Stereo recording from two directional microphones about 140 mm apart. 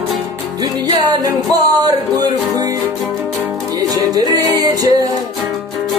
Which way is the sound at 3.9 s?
25° right (ahead or behind).